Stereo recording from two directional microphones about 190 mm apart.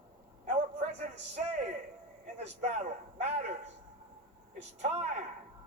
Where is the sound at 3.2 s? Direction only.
35° right (ahead or behind).